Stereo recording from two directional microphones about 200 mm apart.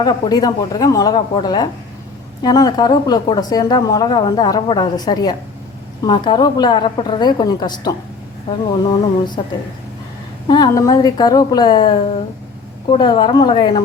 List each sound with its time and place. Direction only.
0.0 s a woman's voice: 20° left (ahead or behind)
10.5 s a woman's voice: 20° left (ahead or behind)